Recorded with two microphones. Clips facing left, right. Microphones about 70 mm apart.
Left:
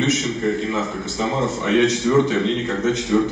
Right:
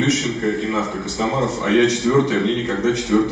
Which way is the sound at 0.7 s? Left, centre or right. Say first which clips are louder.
Right 2 dB; centre.